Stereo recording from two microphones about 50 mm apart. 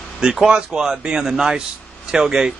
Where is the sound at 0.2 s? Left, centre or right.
Centre.